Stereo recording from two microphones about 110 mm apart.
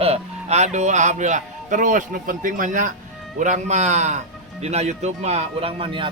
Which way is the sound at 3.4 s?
90° right.